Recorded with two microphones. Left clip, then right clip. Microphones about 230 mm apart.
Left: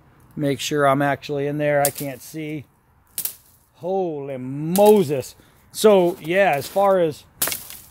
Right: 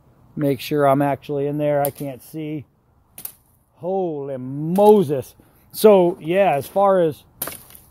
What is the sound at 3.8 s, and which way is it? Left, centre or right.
Speech, right.